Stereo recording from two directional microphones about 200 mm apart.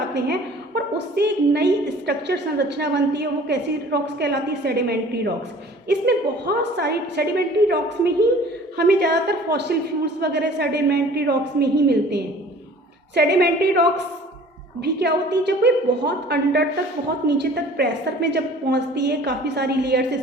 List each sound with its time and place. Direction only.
0.1 s a woman's voice: 55° right (ahead or behind)